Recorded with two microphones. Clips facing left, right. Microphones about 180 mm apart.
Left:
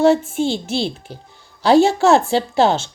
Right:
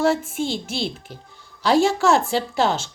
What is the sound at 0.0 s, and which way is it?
A child's voice, 30° left (ahead or behind).